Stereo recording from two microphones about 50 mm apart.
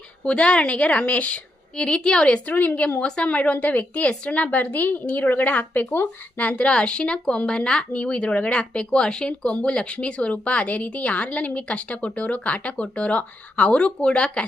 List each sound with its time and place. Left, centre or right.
0.3 s speech: left
2.5 s a woman's voice: left
3.0 s a woman's voice: centre; by 6.1 s left
6.3 s speech: left